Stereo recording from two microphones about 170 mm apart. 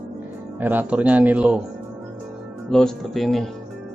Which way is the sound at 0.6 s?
10° right (ahead or behind).